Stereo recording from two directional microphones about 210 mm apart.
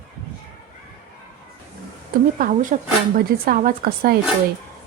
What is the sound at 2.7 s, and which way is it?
Speech, 35° right (ahead or behind).